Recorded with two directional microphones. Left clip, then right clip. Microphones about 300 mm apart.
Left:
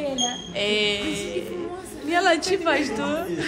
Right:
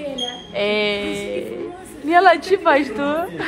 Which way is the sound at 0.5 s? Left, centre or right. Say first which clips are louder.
Right 5 dB; centre.